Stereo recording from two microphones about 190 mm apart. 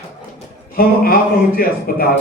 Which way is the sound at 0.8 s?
50° left (ahead or behind).